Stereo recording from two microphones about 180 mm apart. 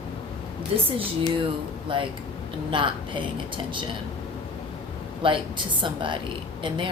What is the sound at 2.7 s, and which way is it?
Speech, 25° right (ahead or behind).